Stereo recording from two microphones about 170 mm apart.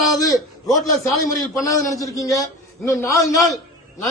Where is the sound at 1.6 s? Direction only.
20° left (ahead or behind).